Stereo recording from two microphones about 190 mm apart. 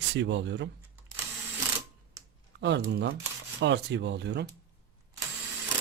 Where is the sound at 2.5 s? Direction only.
65° right (ahead or behind).